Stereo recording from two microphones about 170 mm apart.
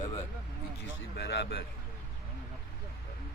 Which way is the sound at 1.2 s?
90° left.